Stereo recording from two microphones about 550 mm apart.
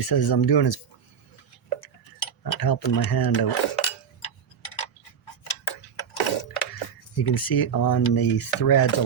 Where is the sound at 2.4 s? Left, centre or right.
Left.